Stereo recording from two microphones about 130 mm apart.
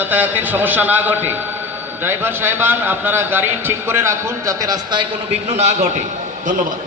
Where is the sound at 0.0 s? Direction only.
15° right (ahead or behind); by 5.0 s 30° right (ahead or behind).